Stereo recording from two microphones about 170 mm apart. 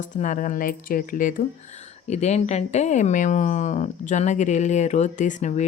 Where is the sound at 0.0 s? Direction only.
50° left (ahead or behind).